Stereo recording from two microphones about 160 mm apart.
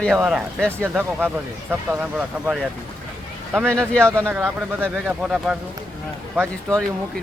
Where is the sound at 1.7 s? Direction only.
10° right (ahead or behind).